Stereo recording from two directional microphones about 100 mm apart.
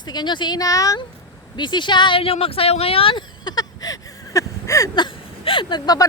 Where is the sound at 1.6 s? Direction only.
50° left (ahead or behind).